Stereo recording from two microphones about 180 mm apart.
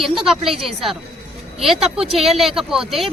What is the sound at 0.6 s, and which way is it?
Speech, centre (ahead or behind).